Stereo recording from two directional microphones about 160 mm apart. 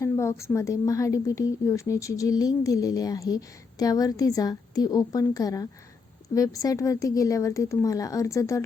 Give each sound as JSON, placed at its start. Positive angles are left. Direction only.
{"t": 0.0, "sound": "a woman's voice", "side_deg": 15}